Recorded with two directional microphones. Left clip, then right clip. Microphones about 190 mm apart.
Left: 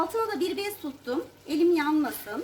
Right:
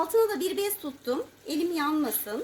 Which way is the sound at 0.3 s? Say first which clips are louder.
Right 1 dB; 50° right (ahead or behind).